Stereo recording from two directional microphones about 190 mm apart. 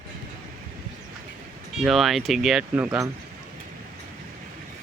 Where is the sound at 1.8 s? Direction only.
Centre (ahead or behind).